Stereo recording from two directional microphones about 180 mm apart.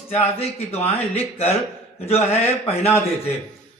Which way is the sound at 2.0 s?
35° left (ahead or behind).